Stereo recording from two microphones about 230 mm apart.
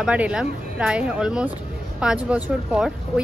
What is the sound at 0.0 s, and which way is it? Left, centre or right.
Speech, centre.